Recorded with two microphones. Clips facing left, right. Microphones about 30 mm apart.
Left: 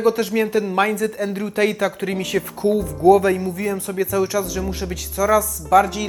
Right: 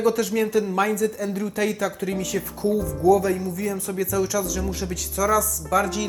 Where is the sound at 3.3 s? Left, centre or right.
Left.